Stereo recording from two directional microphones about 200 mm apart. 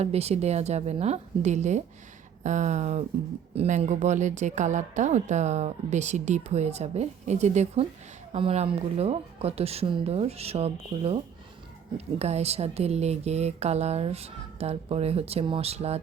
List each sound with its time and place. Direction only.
0.0 s speech: 30° right (ahead or behind)